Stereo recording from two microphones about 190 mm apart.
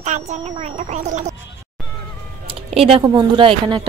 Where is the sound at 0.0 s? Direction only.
35° right (ahead or behind).